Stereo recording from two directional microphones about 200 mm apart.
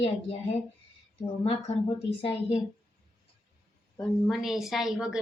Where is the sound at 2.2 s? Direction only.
25° left (ahead or behind).